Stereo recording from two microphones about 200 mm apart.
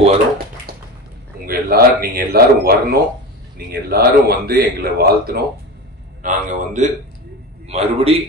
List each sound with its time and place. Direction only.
1.4 s a man's voice: 45° right (ahead or behind)
6.2 s a man's voice: 40° right (ahead or behind)